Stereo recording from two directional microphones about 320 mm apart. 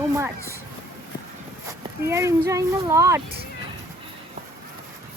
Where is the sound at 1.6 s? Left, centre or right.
Centre.